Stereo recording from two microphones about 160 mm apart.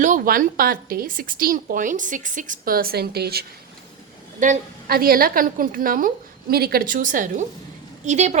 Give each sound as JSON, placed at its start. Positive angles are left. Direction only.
{"t": 0.0, "sound": "a woman's voice", "side_deg": -55}
{"t": 4.4, "sound": "a woman's voice", "side_deg": -60}
{"t": 6.5, "sound": "a woman's voice", "side_deg": -75}